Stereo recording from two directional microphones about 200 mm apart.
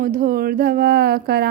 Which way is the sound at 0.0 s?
45° right (ahead or behind).